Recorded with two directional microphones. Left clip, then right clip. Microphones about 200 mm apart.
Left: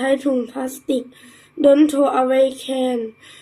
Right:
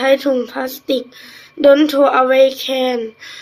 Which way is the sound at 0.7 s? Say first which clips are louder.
Right 3 dB; 25° right (ahead or behind).